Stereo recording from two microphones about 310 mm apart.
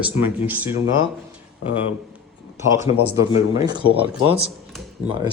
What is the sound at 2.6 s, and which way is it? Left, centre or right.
Speech, centre.